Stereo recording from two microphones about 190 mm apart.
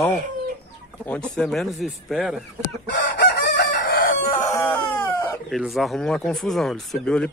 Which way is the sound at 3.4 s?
55° left (ahead or behind).